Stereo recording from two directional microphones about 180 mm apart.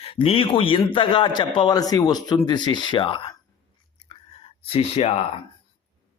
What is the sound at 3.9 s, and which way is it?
Chewing, 30° left (ahead or behind).